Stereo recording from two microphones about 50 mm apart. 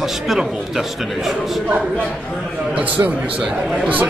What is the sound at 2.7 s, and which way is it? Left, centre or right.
Speech, right.